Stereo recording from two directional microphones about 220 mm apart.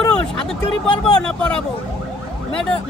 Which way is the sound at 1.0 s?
5° left (ahead or behind).